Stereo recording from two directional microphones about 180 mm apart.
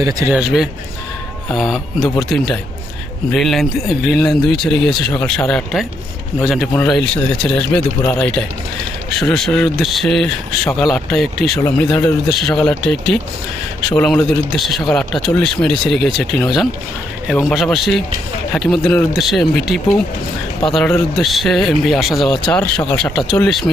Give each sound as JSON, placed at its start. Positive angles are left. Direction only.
{"t": 0.0, "sound": "speech", "side_deg": -20}
{"t": 0.3, "sound": "speech", "side_deg": -5}